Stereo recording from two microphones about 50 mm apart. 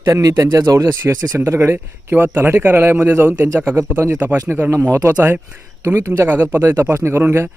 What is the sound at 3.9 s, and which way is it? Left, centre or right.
Speech, right.